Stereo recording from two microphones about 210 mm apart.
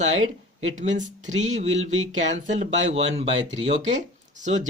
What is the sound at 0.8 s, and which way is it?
Speech, 35° right (ahead or behind).